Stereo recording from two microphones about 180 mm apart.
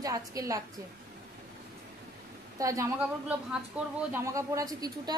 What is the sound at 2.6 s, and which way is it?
Speech, 20° right (ahead or behind).